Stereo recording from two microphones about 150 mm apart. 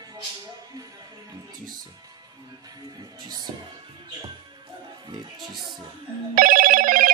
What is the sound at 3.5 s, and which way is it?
Music, 35° right (ahead or behind).